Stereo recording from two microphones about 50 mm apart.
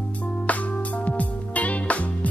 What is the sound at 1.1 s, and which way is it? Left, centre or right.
Music, left.